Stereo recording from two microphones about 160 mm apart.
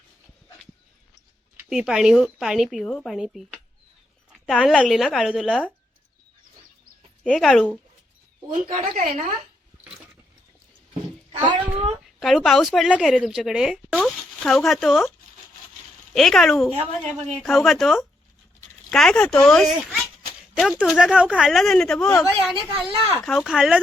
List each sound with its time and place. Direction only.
1.7 s a woman's voice: 5° right (ahead or behind)
7.3 s speech: 5° left (ahead or behind)
8.5 s speech: 55° right (ahead or behind)
12.2 s speech: centre (ahead or behind)
16.1 s speech: centre (ahead or behind)
22.1 s speech: 20° left (ahead or behind)
22.7 s speech: 10° right (ahead or behind)
23.2 s speech: centre (ahead or behind)